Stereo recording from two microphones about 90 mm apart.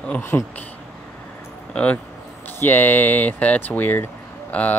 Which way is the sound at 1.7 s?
15° left (ahead or behind).